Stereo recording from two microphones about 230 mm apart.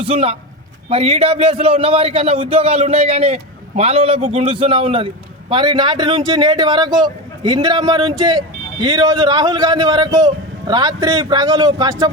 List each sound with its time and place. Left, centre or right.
0.0 s a man's voice: right